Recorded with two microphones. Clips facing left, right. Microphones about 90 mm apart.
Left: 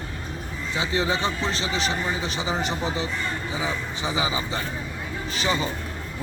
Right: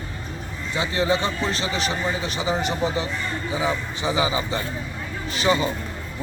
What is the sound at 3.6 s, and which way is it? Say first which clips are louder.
A man's voice: right 5 dB; 35° right (ahead or behind).